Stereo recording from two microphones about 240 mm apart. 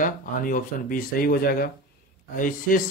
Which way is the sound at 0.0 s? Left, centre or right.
Left.